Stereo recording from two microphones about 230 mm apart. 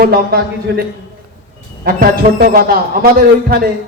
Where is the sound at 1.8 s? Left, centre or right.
Right.